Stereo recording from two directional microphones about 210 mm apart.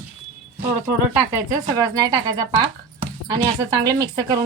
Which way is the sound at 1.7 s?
15° right (ahead or behind).